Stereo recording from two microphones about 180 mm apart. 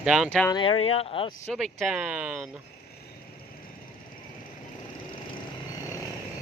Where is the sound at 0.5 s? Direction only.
30° left (ahead or behind).